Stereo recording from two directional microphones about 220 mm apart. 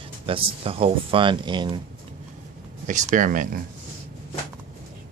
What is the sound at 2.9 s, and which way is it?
Speech, 35° right (ahead or behind).